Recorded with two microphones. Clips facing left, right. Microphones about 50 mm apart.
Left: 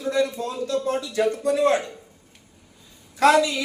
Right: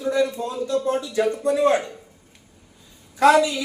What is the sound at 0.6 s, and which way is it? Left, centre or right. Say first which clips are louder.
Speech: right 2 dB; centre.